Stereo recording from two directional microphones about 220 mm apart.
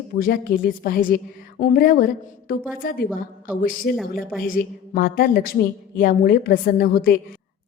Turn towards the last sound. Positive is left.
turn(degrees=40)  # may be behind; listen again after turning